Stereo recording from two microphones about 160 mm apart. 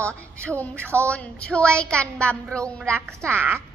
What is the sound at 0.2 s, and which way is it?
Speech, 15° right (ahead or behind).